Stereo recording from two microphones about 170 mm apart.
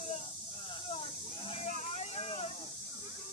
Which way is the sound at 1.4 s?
35° left (ahead or behind).